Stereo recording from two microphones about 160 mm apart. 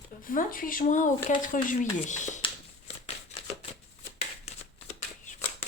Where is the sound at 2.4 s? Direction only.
40° left (ahead or behind).